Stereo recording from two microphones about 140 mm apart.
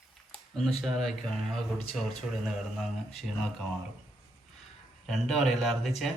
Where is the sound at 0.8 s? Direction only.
Centre (ahead or behind).